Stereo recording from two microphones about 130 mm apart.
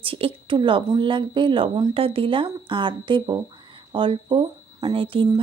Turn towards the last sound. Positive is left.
turn(degrees=-45)  # may be behind; listen again after turning